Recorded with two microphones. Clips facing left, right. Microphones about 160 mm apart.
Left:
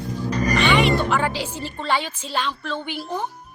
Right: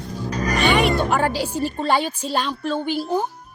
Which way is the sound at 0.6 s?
45° right (ahead or behind).